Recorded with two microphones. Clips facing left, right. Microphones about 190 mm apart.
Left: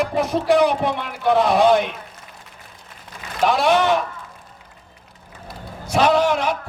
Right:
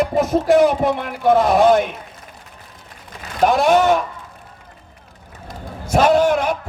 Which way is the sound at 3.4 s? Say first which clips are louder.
Right 3 dB; 45° right (ahead or behind).